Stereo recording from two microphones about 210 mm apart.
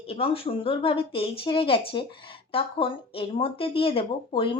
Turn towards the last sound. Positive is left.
turn(degrees=25)  # may be behind; listen again after turning